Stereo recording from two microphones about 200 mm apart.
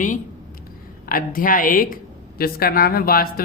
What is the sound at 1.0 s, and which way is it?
A woman's voice, 45° left (ahead or behind).